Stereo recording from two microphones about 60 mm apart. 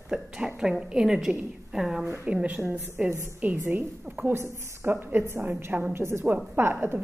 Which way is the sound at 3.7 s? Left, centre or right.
Right.